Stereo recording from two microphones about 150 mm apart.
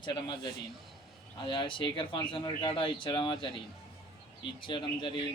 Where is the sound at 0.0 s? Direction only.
30° left (ahead or behind).